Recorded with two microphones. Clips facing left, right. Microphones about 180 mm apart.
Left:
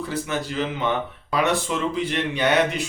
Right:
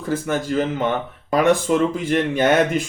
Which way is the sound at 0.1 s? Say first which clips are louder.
Right 10 dB; 45° right (ahead or behind).